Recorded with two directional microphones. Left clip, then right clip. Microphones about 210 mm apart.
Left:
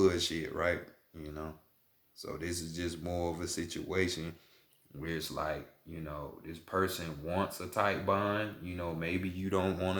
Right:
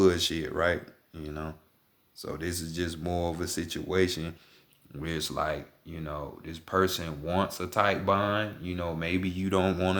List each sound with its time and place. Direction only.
0.0 s speech: 45° right (ahead or behind)